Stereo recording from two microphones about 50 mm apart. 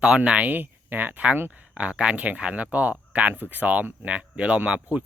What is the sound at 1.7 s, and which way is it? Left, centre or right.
Speech, right.